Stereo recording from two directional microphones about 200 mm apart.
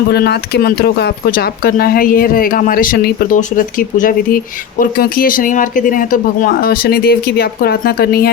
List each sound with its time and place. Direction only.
0.1 s speech: 55° left (ahead or behind)